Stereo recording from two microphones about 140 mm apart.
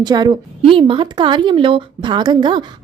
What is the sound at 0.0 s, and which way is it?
A woman's voice, 30° right (ahead or behind).